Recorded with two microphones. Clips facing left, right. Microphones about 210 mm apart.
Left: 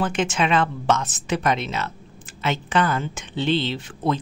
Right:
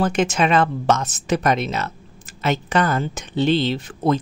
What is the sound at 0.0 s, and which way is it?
Speech, 40° right (ahead or behind).